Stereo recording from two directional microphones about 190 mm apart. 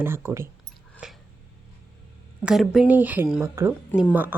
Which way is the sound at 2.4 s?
Centre (ahead or behind).